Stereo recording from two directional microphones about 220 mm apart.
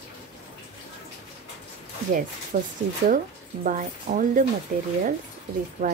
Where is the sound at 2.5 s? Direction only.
35° right (ahead or behind).